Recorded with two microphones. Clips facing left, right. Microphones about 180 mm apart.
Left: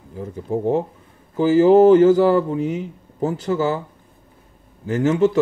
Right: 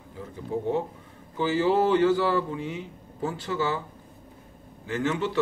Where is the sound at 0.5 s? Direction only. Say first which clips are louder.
Left 7 dB; 45° left (ahead or behind).